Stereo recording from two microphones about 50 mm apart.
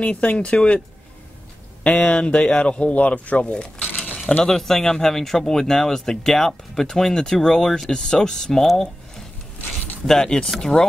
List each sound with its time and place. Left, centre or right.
0.0 s speech: left
1.8 s speech: left
3.8 s a sound: left
4.5 s speech: centre
10.0 s speech: centre